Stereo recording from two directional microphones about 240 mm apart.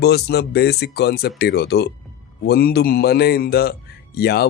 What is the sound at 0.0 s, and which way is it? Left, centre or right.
Speech, left.